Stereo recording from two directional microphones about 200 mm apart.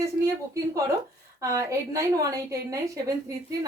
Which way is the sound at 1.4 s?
15° right (ahead or behind).